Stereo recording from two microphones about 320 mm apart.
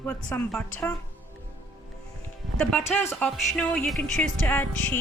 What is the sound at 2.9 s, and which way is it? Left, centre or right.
Music, centre.